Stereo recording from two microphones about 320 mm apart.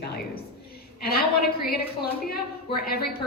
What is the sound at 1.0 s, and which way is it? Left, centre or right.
Speech, left.